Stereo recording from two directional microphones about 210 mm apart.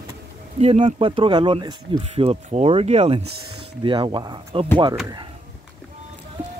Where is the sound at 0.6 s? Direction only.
25° right (ahead or behind).